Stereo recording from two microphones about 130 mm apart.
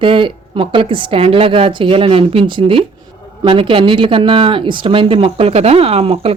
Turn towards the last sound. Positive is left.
turn(degrees=-50)  # may be behind; listen again after turning